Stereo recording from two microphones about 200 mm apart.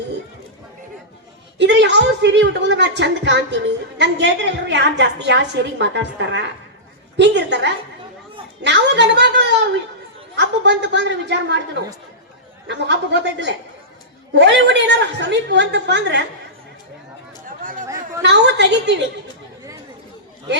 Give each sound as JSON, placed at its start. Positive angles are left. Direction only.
{"t": 1.5, "sound": "a woman's voice", "side_deg": -60}
{"t": 17.6, "sound": "chatter", "side_deg": -45}
{"t": 17.8, "sound": "chatter", "side_deg": -15}
{"t": 18.2, "sound": "a woman's voice", "side_deg": -60}